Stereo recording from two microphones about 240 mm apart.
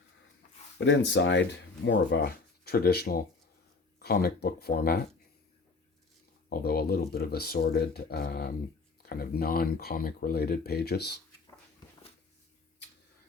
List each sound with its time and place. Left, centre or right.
0.8 s speech: left
6.5 s speech: left